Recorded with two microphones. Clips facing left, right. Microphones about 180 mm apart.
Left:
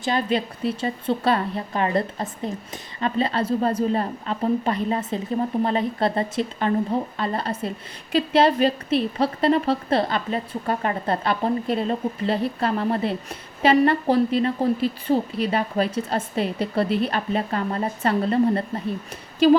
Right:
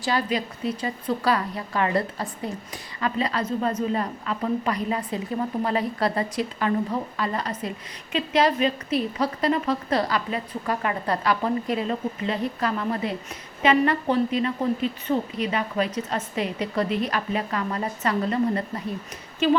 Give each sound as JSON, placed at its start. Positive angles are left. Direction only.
{"t": 0.0, "sound": "a woman's voice", "side_deg": 25}